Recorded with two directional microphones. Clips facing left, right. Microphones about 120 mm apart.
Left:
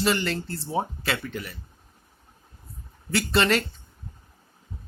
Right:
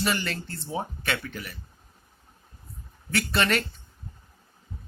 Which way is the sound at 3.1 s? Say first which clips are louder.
Left 3 dB; 30° left (ahead or behind).